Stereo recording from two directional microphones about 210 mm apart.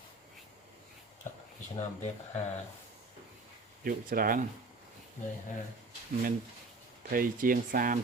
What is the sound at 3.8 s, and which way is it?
Speech, 45° right (ahead or behind).